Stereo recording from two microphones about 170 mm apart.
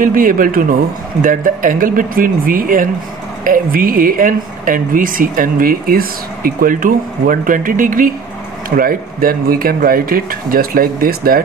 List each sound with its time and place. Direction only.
0.0 s a woman's voice: 55° right (ahead or behind)